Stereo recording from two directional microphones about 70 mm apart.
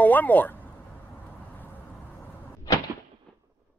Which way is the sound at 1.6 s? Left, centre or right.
Left.